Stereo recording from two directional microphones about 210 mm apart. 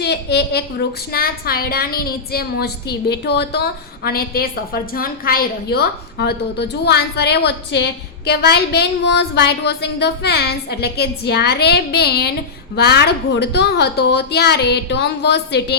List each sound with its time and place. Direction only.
0.0 s a woman's voice: 50° left (ahead or behind)